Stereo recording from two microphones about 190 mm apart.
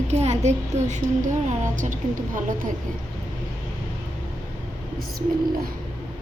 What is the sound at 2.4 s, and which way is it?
Speech, 45° right (ahead or behind).